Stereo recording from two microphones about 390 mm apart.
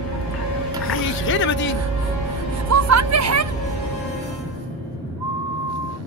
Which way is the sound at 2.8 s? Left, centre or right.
Right.